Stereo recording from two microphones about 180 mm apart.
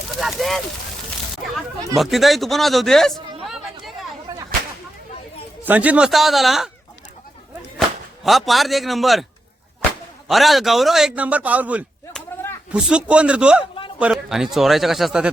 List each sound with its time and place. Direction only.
0.1 s speech: centre (ahead or behind)
2.0 s a man's voice: centre (ahead or behind)
3.4 s chatter: centre (ahead or behind)
4.3 s whip: 20° right (ahead or behind)
5.6 s a man's voice: 10° right (ahead or behind)
7.8 s speech: centre (ahead or behind)
10.2 s a man's voice: centre (ahead or behind)